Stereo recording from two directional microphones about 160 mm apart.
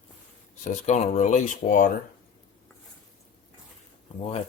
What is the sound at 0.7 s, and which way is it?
Speech, 50° left (ahead or behind).